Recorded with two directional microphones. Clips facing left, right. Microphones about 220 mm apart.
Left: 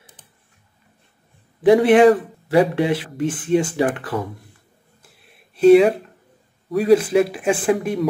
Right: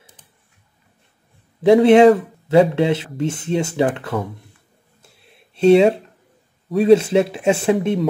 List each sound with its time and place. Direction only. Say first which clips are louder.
1.6 s speech: right 2 dB; 25° right (ahead or behind)
5.0 s a sound: right 3 dB; 25° right (ahead or behind)
6.7 s speech: right 2 dB; 25° right (ahead or behind)